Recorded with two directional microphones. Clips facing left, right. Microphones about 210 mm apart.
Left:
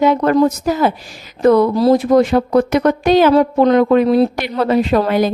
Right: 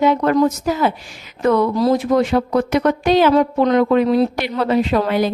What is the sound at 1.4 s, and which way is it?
Speech, 35° left (ahead or behind).